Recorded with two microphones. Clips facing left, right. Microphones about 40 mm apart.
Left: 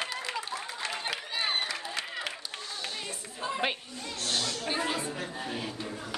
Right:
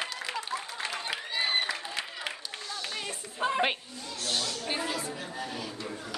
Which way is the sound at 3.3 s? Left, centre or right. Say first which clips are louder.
Right 6 dB; right.